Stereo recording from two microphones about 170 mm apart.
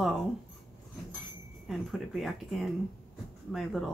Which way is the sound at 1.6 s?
Centre (ahead or behind).